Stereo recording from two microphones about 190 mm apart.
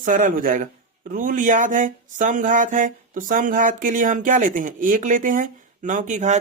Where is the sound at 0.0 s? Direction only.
45° right (ahead or behind).